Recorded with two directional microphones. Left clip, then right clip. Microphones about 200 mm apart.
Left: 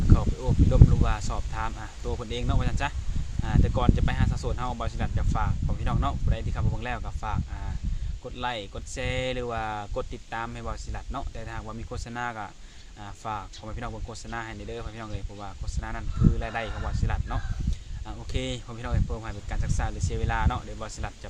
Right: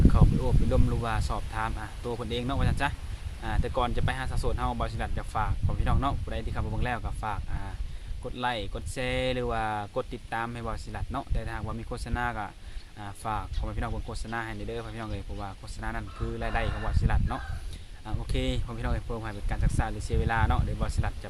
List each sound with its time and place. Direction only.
0.7 s speech: 5° right (ahead or behind)